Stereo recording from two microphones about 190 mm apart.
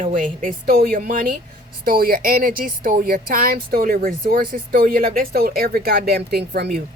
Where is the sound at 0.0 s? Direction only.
45° right (ahead or behind).